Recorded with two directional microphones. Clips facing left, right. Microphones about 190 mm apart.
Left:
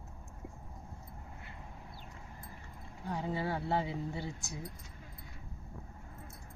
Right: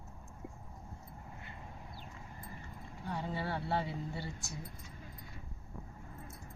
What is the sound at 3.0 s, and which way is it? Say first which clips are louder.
Speech: left 3 dB; 15° left (ahead or behind).